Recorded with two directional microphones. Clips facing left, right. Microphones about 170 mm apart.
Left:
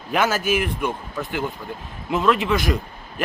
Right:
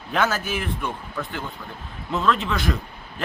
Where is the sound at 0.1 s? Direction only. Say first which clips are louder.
Left 3 dB; 5° left (ahead or behind).